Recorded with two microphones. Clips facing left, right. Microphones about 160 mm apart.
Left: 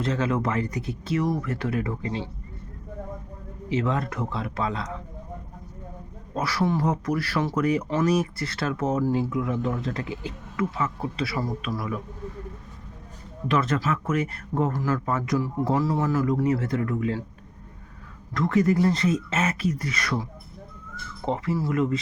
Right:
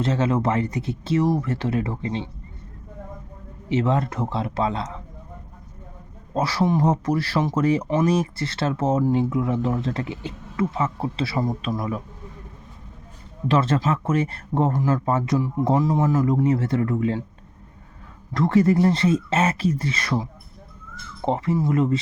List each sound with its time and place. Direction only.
0.0 s speech: 25° right (ahead or behind)
3.7 s speech: 25° right (ahead or behind)
6.3 s speech: 25° right (ahead or behind)
13.5 s speech: 30° right (ahead or behind)
18.3 s speech: 30° right (ahead or behind)
21.2 s speech: 25° right (ahead or behind)